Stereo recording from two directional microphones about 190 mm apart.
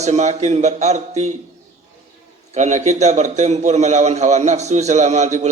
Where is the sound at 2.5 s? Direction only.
40° right (ahead or behind).